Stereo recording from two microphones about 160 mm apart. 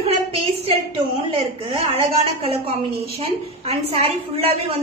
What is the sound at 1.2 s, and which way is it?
A woman's voice, 35° right (ahead or behind).